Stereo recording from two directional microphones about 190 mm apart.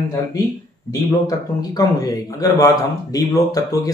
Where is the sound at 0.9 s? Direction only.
20° left (ahead or behind).